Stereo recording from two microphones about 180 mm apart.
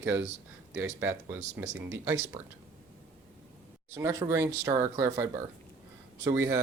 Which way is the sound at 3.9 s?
15° right (ahead or behind).